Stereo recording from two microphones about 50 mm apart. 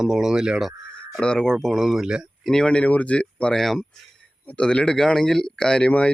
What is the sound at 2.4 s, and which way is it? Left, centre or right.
Speech, centre.